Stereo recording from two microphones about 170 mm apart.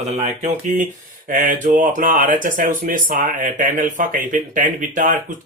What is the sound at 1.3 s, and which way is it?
Speech, 50° right (ahead or behind).